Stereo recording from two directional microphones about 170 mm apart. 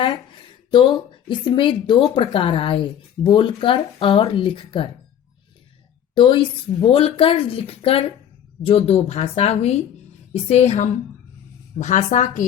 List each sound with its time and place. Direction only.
0.9 s speech: 30° left (ahead or behind)
6.1 s a woman's voice: 30° left (ahead or behind); by 12.5 s 45° left (ahead or behind)